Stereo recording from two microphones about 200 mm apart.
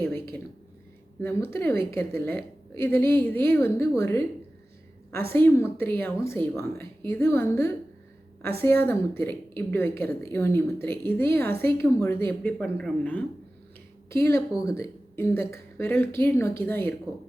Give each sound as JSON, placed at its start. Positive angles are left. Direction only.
{"t": 1.2, "sound": "a woman's voice", "side_deg": 10}
{"t": 2.9, "sound": "a woman's voice", "side_deg": -50}
{"t": 3.2, "sound": "a woman's voice", "side_deg": 10}
{"t": 5.3, "sound": "a woman's voice", "side_deg": 10}